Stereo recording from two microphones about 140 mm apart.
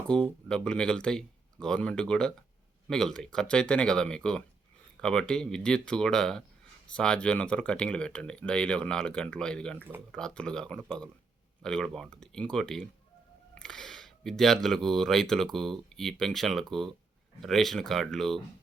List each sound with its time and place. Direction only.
0.1 s speech: 5° left (ahead or behind)